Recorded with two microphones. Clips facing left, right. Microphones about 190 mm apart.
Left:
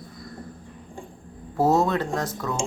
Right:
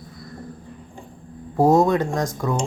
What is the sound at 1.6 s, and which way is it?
Speech, 15° right (ahead or behind).